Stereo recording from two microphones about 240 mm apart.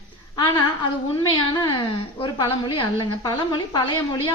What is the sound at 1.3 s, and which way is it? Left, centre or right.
A woman's voice, centre.